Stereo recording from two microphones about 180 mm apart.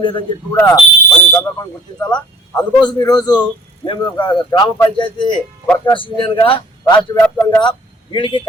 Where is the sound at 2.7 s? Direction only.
20° left (ahead or behind).